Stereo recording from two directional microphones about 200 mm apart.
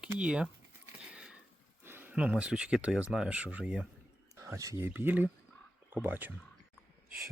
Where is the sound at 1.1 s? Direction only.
5° right (ahead or behind).